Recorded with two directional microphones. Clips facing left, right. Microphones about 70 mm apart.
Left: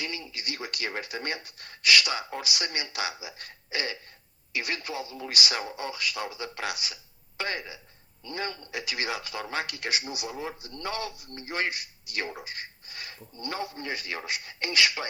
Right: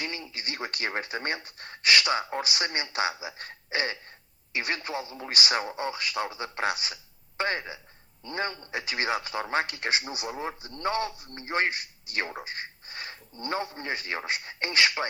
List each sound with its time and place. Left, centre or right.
0.0 s a man's voice: right